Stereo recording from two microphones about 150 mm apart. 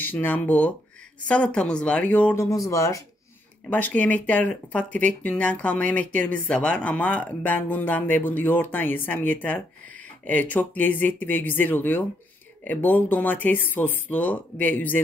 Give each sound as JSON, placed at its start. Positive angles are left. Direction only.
{"t": 0.0, "sound": "speech", "side_deg": 10}
{"t": 2.5, "sound": "speech", "side_deg": 20}
{"t": 3.7, "sound": "speech", "side_deg": 10}